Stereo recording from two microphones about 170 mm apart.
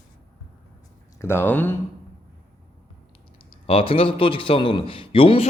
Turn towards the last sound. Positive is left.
turn(degrees=30)  # may be behind; listen again after turning